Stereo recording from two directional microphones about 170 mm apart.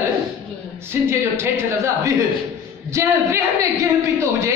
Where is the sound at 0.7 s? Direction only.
15° right (ahead or behind).